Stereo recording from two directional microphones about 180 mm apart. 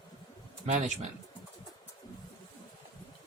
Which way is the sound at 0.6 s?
40° right (ahead or behind).